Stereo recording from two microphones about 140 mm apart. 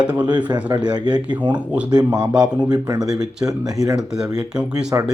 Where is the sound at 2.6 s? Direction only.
25° right (ahead or behind).